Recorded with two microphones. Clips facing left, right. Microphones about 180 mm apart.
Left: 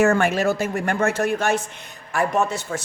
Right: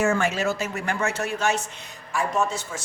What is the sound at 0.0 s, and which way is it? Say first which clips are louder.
A woman's voice: left 5 dB; 60° left (ahead or behind).